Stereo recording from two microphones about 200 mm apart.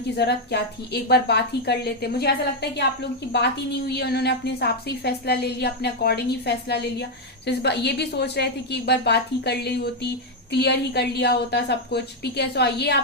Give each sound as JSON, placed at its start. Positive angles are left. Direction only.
{"t": 0.2, "sound": "a woman's voice", "side_deg": 55}